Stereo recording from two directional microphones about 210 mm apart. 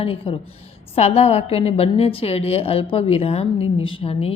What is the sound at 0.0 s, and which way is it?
A woman's voice, 25° left (ahead or behind).